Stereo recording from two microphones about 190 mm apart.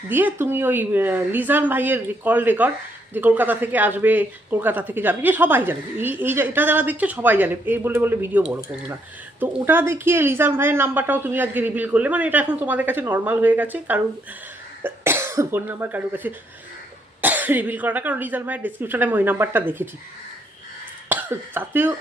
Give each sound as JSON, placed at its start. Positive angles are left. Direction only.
{"t": 0.1, "sound": "speech", "side_deg": -10}
{"t": 21.1, "sound": "speech", "side_deg": -10}